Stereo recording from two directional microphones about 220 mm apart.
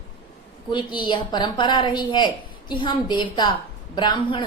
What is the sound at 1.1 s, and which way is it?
A woman's voice, 20° left (ahead or behind).